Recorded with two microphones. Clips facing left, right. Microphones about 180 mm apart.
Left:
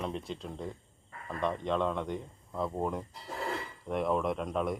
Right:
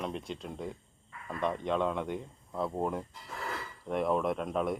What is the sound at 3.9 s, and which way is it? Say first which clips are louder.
Speech: right 1 dB; centre (ahead or behind).